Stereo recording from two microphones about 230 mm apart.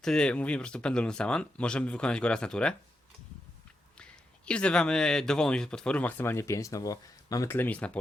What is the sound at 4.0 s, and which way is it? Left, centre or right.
Speech, centre.